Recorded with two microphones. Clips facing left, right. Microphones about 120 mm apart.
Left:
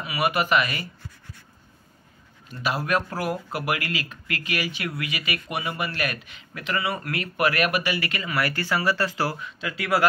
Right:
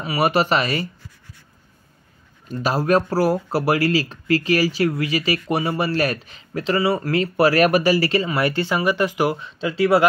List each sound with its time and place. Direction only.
0.0 s speech: 30° right (ahead or behind)
2.4 s speech: 40° right (ahead or behind); by 9.4 s 15° right (ahead or behind)
9.4 s speech: 30° right (ahead or behind)